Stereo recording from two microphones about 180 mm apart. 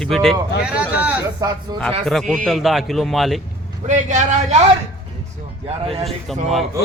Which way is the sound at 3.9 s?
45° right (ahead or behind).